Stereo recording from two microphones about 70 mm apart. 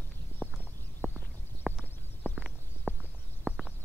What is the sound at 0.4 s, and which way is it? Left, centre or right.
Horse, centre.